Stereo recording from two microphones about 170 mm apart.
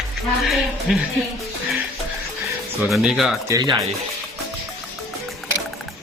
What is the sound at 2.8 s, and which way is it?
Speech, centre (ahead or behind).